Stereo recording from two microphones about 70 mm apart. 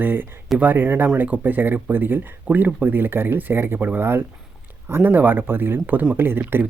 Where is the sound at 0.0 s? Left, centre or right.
Right.